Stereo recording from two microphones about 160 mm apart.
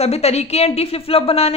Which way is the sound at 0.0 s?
40° left (ahead or behind).